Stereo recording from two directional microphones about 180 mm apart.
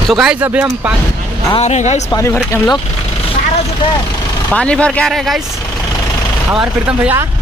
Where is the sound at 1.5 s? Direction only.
40° left (ahead or behind).